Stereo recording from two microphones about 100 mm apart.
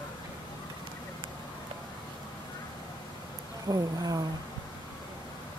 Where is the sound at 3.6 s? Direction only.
35° right (ahead or behind).